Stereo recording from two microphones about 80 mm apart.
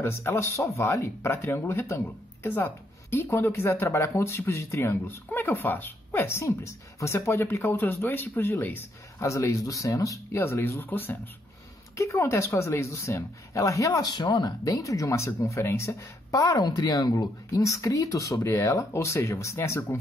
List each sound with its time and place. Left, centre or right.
0.0 s speech: left
9.2 s speech: left
10.4 s speech: left
12.0 s a woman's voice: left
14.1 s speech: left